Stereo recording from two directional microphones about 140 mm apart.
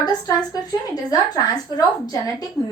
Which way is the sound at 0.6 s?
25° left (ahead or behind).